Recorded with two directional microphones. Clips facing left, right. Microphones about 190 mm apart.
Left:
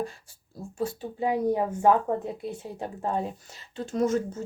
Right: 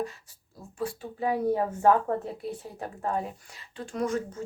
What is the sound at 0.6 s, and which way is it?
Speech, 25° left (ahead or behind).